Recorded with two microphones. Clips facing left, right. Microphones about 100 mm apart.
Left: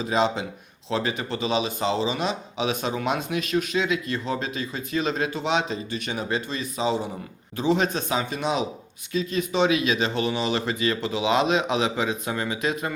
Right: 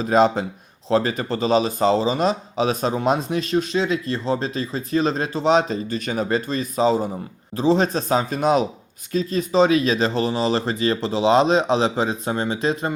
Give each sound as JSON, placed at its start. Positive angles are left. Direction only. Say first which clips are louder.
{"t": 0.0, "sound": "speech", "louder": "right 6 dB", "side_deg": -45}